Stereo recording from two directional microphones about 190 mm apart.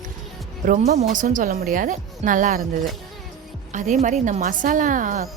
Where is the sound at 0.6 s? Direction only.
40° right (ahead or behind).